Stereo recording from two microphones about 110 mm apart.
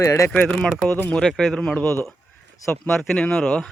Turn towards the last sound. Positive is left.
turn(degrees=5)  # may be behind; listen again after turning